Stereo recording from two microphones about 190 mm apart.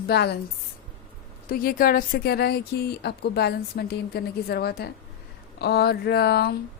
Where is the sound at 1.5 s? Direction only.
50° left (ahead or behind).